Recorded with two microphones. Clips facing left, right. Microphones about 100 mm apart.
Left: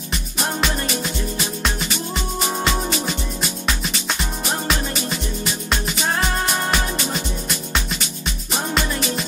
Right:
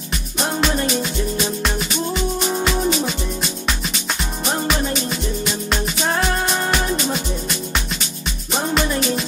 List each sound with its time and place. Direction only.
0.1 s music: centre (ahead or behind)
4.2 s music: centre (ahead or behind)